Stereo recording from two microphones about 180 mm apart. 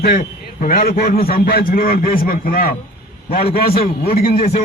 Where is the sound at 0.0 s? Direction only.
50° left (ahead or behind).